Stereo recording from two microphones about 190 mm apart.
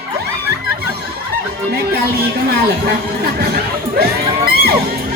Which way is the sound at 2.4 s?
55° right (ahead or behind).